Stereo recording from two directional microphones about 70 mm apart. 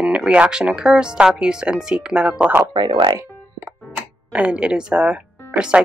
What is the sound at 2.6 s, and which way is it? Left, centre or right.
Speech, right.